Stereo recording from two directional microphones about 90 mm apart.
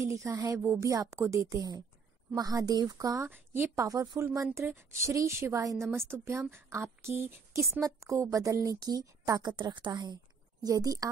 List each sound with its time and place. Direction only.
0.0 s a woman's voice: 35° right (ahead or behind)
3.3 s a woman's voice: 20° right (ahead or behind)
3.7 s a woman's voice: 40° right (ahead or behind)
7.8 s a woman's voice: 35° right (ahead or behind)
9.5 s a woman's voice: 60° right (ahead or behind)
10.6 s speech: 45° right (ahead or behind)